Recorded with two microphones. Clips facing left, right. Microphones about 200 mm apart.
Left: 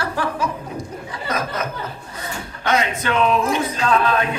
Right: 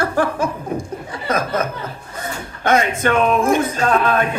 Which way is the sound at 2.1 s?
50° right (ahead or behind).